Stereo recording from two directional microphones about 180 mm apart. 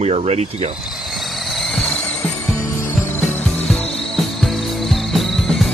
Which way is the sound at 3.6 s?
Centre (ahead or behind).